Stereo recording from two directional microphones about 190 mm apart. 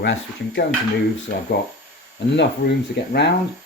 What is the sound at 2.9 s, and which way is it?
Speech, 60° left (ahead or behind).